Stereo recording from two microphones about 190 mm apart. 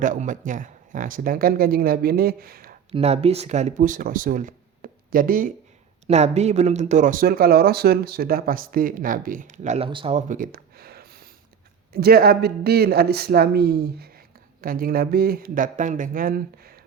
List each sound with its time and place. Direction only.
0.0 s speech: 45° right (ahead or behind)
2.9 s speech: 35° right (ahead or behind)
6.1 s a man's voice: 35° right (ahead or behind)